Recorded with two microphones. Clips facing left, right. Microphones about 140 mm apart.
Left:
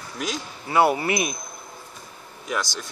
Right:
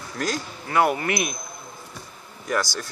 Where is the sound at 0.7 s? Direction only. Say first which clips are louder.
Left 2 dB; 30° left (ahead or behind).